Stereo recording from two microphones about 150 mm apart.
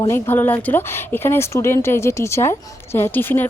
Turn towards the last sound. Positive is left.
turn(degrees=15)  # may be behind; listen again after turning